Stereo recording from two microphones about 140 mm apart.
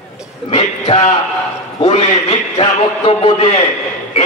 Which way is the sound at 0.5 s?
50° left (ahead or behind).